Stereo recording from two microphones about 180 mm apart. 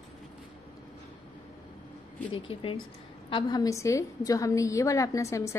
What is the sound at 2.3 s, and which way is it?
A woman's voice, 30° left (ahead or behind).